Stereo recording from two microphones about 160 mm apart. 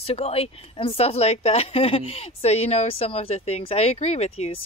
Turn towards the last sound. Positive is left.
turn(degrees=40)  # may be behind; listen again after turning